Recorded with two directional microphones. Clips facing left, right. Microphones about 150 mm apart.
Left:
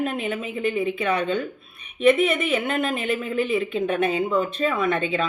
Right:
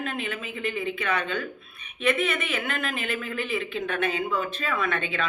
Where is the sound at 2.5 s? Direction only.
25° left (ahead or behind).